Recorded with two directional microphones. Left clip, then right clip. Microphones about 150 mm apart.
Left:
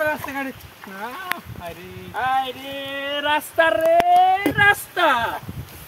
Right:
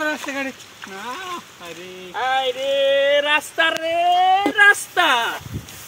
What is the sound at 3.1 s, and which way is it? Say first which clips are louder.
Speech: right 2 dB; 20° left (ahead or behind).